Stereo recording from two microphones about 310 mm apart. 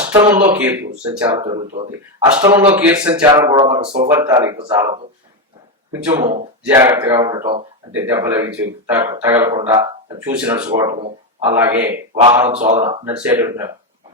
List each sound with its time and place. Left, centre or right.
0.0 s a sound: centre
0.3 s speech: centre
2.3 s speech: centre
6.7 s speech: centre
11.5 s speech: centre
12.5 s speech: right
12.8 s speech: centre